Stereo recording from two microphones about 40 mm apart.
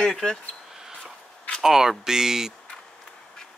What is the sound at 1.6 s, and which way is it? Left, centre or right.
Speech, centre.